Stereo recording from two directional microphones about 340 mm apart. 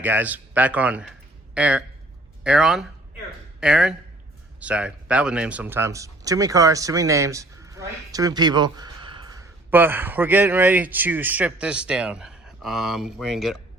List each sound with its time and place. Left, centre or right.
0.0 s speech: centre